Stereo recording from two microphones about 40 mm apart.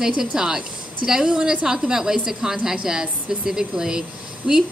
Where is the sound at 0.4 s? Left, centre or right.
Centre.